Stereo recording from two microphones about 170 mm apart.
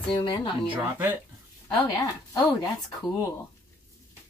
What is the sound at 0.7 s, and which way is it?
Speech, 10° right (ahead or behind).